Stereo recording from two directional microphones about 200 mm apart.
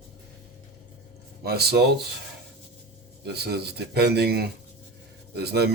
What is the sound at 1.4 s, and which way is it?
Speech, 55° right (ahead or behind).